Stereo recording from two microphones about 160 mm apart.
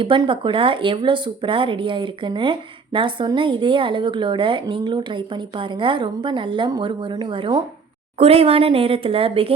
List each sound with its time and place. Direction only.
0.0 s speech: 30° right (ahead or behind)